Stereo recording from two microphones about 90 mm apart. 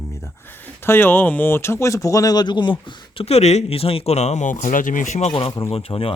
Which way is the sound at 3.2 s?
90° left.